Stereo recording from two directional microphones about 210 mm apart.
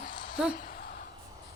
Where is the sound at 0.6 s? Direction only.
45° left (ahead or behind).